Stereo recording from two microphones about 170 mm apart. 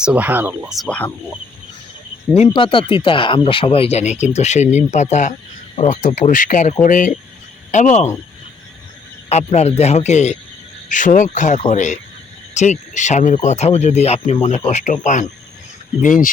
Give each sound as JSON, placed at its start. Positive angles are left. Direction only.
{"t": 0.0, "sound": "speech", "side_deg": -5}
{"t": 0.8, "sound": "speech", "side_deg": 5}
{"t": 2.3, "sound": "speech", "side_deg": 35}
{"t": 9.3, "sound": "speech", "side_deg": 40}